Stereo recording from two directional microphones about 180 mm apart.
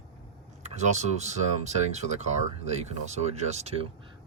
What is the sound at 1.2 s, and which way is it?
Speech, 40° right (ahead or behind).